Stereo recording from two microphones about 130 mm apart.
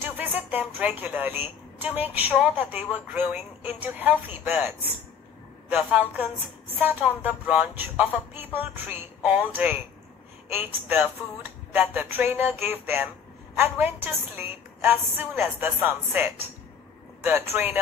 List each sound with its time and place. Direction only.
0.0 s a woman's voice: 15° right (ahead or behind)